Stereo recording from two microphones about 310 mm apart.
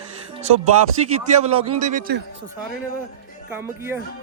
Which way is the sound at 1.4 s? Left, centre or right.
Right.